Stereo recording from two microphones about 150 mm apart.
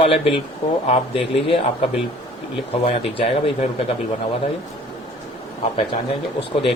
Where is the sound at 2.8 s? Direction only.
40° left (ahead or behind).